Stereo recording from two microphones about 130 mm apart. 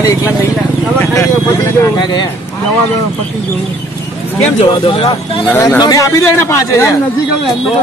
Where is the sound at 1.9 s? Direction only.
35° left (ahead or behind).